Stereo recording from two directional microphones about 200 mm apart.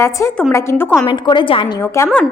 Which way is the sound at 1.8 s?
15° left (ahead or behind).